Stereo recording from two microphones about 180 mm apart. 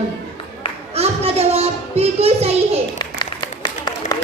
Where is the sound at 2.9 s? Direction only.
25° left (ahead or behind).